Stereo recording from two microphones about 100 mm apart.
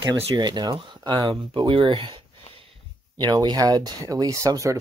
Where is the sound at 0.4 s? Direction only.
45° right (ahead or behind).